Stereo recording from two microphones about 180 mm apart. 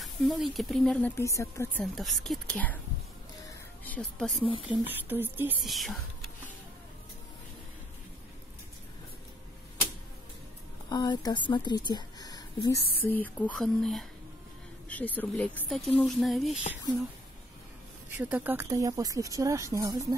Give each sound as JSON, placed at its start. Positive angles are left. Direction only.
{"t": 0.0, "sound": "speech", "side_deg": 0}
{"t": 1.1, "sound": "speech", "side_deg": 15}
{"t": 3.4, "sound": "a sound", "side_deg": 10}
{"t": 4.5, "sound": "speech", "side_deg": 30}
{"t": 5.0, "sound": "speech", "side_deg": -10}
{"t": 5.6, "sound": "speech", "side_deg": 0}
{"t": 10.9, "sound": "speech", "side_deg": 20}
{"t": 13.0, "sound": "speech", "side_deg": 10}
{"t": 18.1, "sound": "speech", "side_deg": -10}